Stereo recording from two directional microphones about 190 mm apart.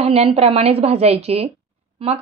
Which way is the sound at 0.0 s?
30° right (ahead or behind).